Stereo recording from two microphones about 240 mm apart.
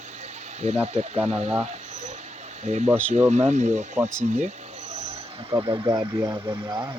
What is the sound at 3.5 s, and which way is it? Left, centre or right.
Speech, right.